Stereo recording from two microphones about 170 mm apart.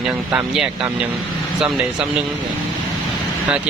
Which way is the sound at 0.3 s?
5° right (ahead or behind).